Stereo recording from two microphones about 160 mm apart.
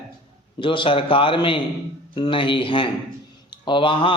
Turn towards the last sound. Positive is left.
turn(degrees=30)  # may be behind; listen again after turning